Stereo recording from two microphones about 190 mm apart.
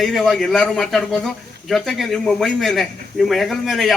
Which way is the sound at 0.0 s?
Centre (ahead or behind).